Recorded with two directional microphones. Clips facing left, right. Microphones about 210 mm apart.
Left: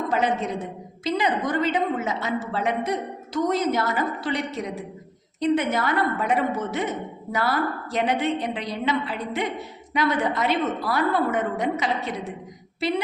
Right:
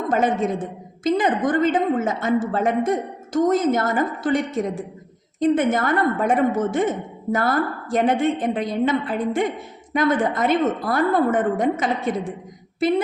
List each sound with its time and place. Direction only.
0.1 s a woman's voice: 50° right (ahead or behind)